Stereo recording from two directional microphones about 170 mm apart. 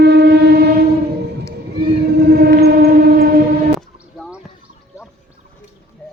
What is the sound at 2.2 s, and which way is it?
Train, 65° right (ahead or behind).